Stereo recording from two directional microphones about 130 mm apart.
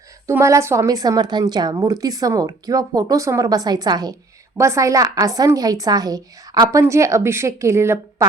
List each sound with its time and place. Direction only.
0.3 s a woman's voice: 20° right (ahead or behind)